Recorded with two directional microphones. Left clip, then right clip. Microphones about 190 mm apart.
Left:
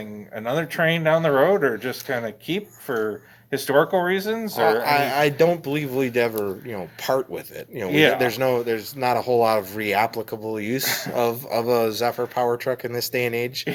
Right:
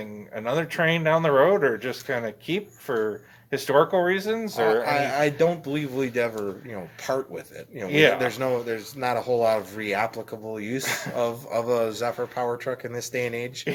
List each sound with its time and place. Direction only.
0.3 s speech: centre (ahead or behind)
4.6 s speech: 40° left (ahead or behind)
7.9 s speech: centre (ahead or behind)
8.2 s speech: 40° left (ahead or behind)
10.8 s speech: centre (ahead or behind)
11.1 s speech: 40° left (ahead or behind)